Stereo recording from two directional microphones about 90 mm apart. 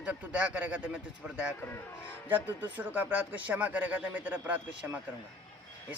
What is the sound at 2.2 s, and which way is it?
Speech, 20° right (ahead or behind).